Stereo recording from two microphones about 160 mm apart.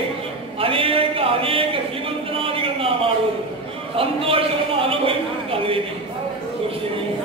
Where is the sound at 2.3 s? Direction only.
35° right (ahead or behind).